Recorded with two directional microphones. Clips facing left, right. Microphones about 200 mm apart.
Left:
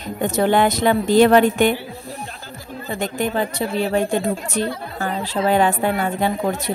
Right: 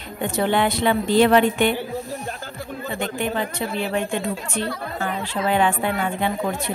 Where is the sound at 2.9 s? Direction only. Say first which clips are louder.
Left 3 dB; 40° left (ahead or behind).